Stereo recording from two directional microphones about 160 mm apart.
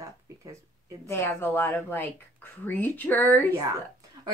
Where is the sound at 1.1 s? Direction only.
15° left (ahead or behind).